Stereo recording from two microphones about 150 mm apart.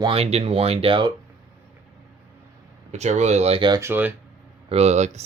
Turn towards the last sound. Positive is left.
turn(degrees=-50)  # may be behind; listen again after turning